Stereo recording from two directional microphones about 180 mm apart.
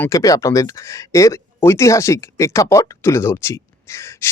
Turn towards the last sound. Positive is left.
turn(degrees=15)  # may be behind; listen again after turning